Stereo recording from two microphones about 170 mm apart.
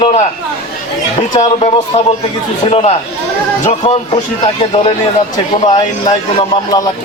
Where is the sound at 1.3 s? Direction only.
40° left (ahead or behind).